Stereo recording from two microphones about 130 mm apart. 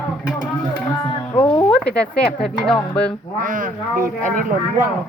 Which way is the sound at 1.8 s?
10° left (ahead or behind).